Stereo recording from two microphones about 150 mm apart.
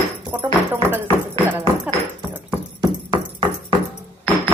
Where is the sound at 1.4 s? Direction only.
15° right (ahead or behind).